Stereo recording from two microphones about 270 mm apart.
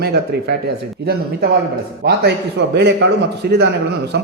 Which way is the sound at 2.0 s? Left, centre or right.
Right.